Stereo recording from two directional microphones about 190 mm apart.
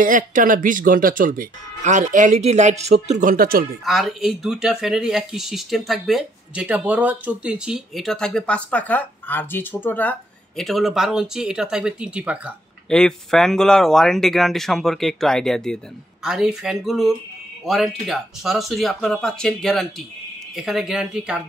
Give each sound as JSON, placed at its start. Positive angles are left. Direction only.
{"t": 0.0, "sound": "speech", "side_deg": -45}
{"t": 3.8, "sound": "speech", "side_deg": 0}